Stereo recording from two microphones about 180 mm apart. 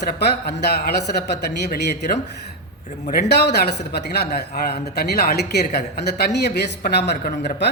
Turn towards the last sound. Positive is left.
turn(degrees=65)  # may be behind; listen again after turning